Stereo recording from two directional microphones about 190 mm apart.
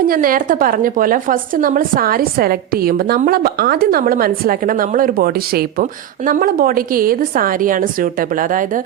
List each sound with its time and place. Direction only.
0.1 s a woman's voice: 50° right (ahead or behind)